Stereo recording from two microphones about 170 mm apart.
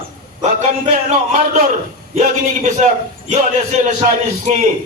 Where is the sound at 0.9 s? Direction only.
45° right (ahead or behind).